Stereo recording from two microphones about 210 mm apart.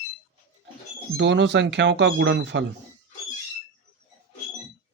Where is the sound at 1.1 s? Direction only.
55° right (ahead or behind).